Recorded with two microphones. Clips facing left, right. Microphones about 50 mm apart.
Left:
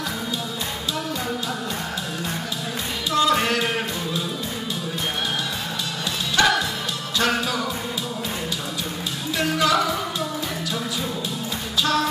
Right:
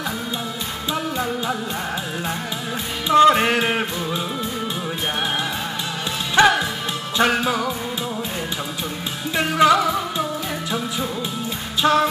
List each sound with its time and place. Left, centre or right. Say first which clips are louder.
3.1 s music: right 7 dB; right
6.3 s music: right 4 dB; right
9.4 s music: right 5 dB; right
11.8 s music: right 5 dB; right